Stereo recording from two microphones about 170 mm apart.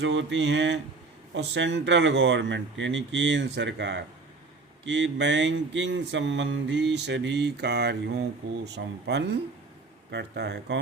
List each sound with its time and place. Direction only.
0.0 s mantra: 90° right
8.6 s speech: 80° right